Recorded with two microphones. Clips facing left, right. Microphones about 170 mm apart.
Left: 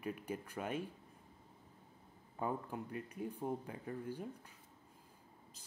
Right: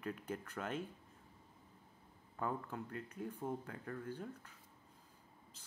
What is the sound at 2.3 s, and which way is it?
Speech, 15° left (ahead or behind).